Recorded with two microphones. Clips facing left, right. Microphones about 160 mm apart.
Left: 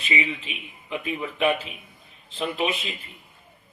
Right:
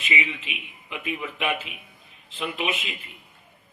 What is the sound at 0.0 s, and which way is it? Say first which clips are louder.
A man's voice: left 2 dB; 35° left (ahead or behind).